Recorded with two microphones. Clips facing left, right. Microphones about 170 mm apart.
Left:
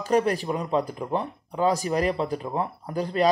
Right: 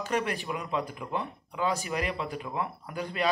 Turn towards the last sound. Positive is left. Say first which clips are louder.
# left 7 dB
turn(degrees=35)  # may be behind; listen again after turning